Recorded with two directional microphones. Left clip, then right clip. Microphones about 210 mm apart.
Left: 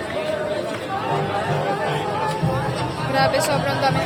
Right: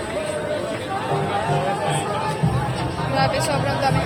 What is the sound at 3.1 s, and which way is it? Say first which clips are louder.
Speech: left 2 dB; 10° left (ahead or behind).